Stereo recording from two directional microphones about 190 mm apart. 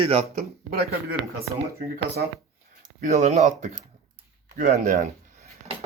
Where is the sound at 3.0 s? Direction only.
40° right (ahead or behind).